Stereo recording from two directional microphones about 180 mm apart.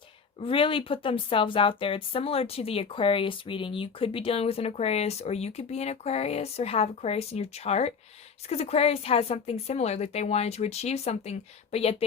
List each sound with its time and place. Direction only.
0.3 s speech: 30° left (ahead or behind)